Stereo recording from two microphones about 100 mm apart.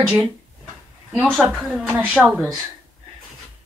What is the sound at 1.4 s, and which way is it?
Speech, 5° right (ahead or behind).